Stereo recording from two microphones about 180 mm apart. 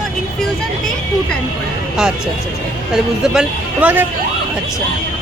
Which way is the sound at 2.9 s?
5° right (ahead or behind).